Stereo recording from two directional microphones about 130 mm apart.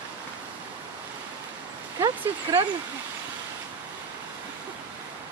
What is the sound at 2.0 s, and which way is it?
Speech, 25° right (ahead or behind).